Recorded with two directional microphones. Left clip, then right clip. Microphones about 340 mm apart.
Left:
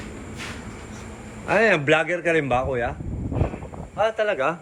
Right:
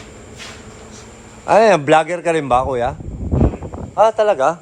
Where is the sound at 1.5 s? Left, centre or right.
Centre.